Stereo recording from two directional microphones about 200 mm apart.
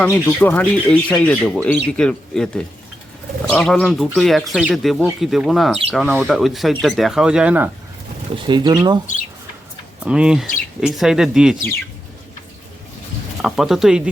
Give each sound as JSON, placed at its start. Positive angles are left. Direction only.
{"t": 0.0, "sound": "speech", "side_deg": 10}
{"t": 8.4, "sound": "speech", "side_deg": -20}
{"t": 10.0, "sound": "speech", "side_deg": -5}
{"t": 13.4, "sound": "speech", "side_deg": 0}